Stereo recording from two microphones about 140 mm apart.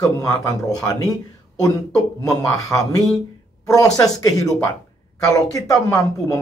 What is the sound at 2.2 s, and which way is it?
Speech, 25° left (ahead or behind).